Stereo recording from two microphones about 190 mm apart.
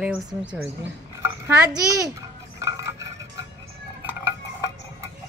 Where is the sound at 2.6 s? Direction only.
20° right (ahead or behind).